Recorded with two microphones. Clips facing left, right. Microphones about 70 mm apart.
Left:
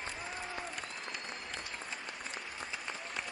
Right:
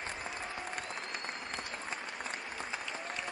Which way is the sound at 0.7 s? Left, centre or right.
Right.